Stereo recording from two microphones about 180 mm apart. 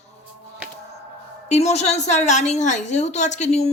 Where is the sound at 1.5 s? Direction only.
40° left (ahead or behind).